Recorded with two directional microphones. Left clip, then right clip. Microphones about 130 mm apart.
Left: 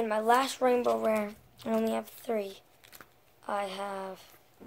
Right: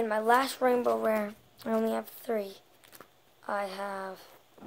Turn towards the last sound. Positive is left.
turn(degrees=-5)  # may be behind; listen again after turning